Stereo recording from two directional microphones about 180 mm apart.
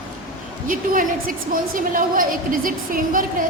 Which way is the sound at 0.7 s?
50° right (ahead or behind).